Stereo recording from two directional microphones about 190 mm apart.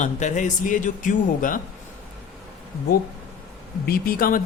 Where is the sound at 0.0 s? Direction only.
40° left (ahead or behind).